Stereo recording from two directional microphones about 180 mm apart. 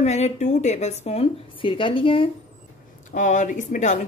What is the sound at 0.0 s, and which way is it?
Speech, 40° left (ahead or behind).